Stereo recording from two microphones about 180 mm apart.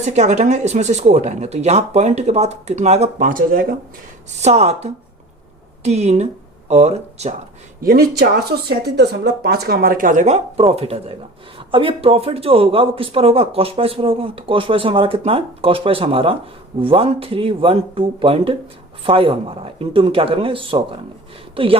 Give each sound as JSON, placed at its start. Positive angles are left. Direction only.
{"t": 0.0, "sound": "speech", "side_deg": -40}
{"t": 4.4, "sound": "speech", "side_deg": -40}
{"t": 7.8, "sound": "speech", "side_deg": -55}